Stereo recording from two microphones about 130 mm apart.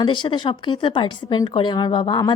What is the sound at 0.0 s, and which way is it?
Speech, 35° left (ahead or behind).